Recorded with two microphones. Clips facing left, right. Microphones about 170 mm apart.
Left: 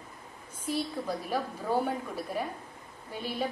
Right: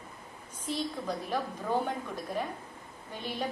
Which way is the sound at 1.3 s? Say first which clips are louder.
Left 1 dB; 10° left (ahead or behind).